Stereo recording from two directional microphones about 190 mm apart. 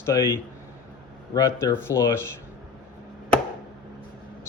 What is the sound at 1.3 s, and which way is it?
Speech, 15° left (ahead or behind).